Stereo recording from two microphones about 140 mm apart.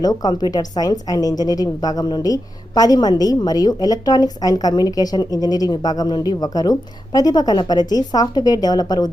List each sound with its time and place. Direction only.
0.0 s a woman's voice: 30° left (ahead or behind)